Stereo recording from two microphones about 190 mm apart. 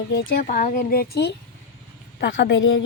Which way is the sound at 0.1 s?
55° left (ahead or behind).